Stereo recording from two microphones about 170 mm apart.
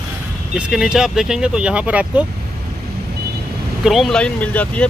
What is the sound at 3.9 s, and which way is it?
Speech, centre (ahead or behind).